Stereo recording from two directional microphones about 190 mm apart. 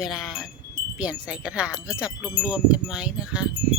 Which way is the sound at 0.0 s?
Centre (ahead or behind).